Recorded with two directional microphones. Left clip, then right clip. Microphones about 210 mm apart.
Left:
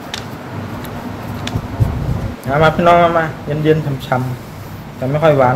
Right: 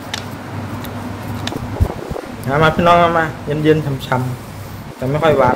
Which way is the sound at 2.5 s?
20° right (ahead or behind).